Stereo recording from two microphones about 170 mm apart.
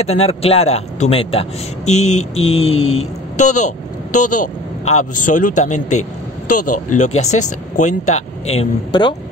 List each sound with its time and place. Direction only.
0.0 s a man's voice: 40° left (ahead or behind)